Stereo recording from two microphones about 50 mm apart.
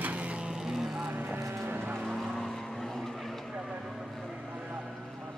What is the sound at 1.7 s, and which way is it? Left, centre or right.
Vehicle, right.